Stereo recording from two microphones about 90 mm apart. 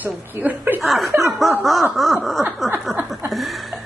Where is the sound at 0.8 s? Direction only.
Centre (ahead or behind).